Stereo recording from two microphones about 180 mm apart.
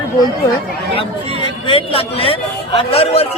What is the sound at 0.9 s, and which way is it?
A man's voice, 30° left (ahead or behind).